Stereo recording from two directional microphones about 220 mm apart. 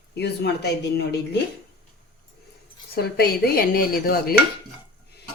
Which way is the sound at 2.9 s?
45° left (ahead or behind).